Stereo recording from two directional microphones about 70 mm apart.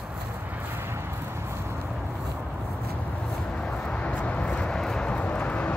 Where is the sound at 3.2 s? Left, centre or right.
Centre.